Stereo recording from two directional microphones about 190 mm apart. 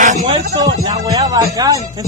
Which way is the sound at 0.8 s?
20° right (ahead or behind).